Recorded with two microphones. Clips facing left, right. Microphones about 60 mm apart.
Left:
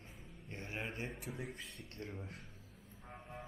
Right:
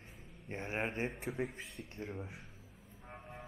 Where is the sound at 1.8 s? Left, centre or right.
Centre.